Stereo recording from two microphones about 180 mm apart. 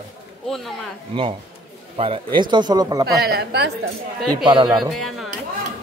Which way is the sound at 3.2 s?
65° right (ahead or behind).